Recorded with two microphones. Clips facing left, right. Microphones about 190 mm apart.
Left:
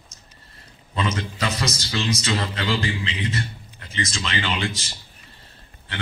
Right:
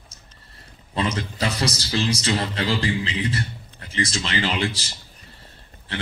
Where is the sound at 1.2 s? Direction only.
30° right (ahead or behind).